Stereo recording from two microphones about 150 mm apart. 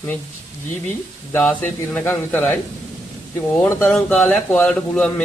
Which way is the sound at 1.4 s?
10° left (ahead or behind).